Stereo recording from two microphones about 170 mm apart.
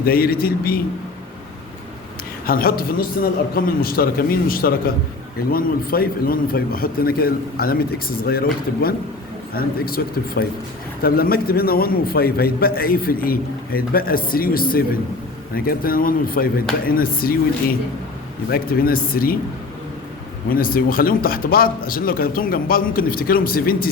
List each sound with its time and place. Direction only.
0.0 s a man's voice: 60° left (ahead or behind)
2.5 s a man's voice: 60° left (ahead or behind)
18.5 s a man's voice: 60° left (ahead or behind)
20.5 s a man's voice: 60° left (ahead or behind)